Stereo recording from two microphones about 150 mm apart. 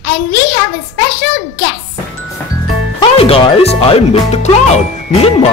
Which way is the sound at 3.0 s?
40° left (ahead or behind).